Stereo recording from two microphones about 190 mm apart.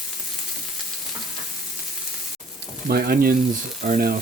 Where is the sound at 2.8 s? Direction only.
50° right (ahead or behind).